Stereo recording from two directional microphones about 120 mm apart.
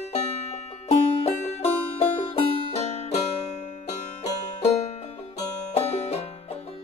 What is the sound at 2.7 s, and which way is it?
Music, 65° left (ahead or behind).